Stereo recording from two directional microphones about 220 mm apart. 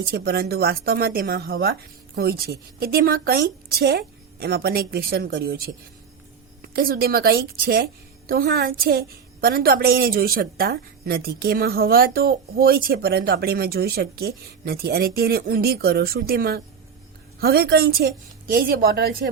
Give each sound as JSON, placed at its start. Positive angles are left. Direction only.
{"t": 0.0, "sound": "a woman's voice", "side_deg": -45}